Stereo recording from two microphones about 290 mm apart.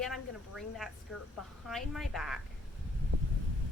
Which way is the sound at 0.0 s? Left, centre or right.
Centre.